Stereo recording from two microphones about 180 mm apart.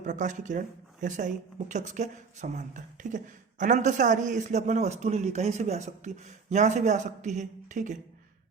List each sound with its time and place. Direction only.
0.0 s a man's voice: 45° right (ahead or behind)